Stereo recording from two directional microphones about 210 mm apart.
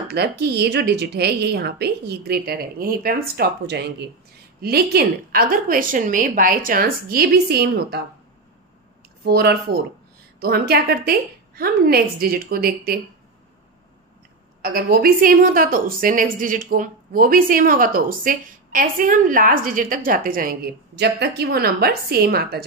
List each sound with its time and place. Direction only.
0.1 s speech: 50° right (ahead or behind)
9.2 s speech: 50° right (ahead or behind)
14.6 s a woman's voice: 45° right (ahead or behind)